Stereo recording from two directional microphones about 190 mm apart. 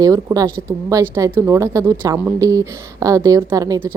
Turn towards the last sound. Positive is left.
turn(degrees=-15)  # may be behind; listen again after turning